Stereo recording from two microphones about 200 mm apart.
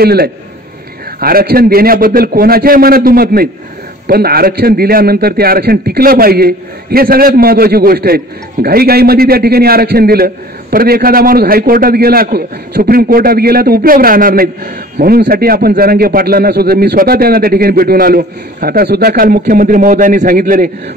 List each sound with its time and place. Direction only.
0.0 s a man's voice: 50° right (ahead or behind)